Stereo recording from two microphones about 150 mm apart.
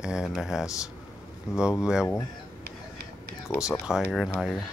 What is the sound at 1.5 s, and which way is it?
Speech, 20° left (ahead or behind).